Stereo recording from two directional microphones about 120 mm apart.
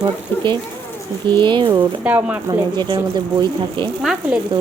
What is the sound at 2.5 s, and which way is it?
Speech, 40° right (ahead or behind).